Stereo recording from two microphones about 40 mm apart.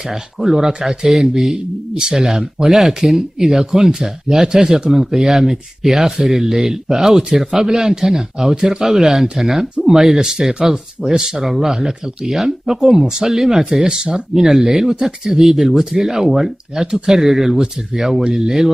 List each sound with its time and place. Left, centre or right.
0.0 s speech: centre